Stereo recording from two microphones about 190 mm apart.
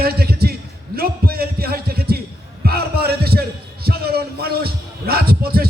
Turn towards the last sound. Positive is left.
turn(degrees=-55)  # may be behind; listen again after turning